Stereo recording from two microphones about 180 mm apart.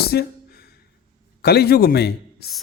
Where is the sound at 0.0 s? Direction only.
60° left (ahead or behind).